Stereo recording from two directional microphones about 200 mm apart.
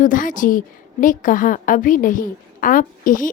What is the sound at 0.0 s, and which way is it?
A woman's voice, 40° left (ahead or behind).